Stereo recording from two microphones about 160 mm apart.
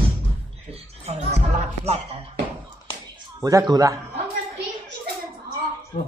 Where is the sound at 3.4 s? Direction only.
20° right (ahead or behind).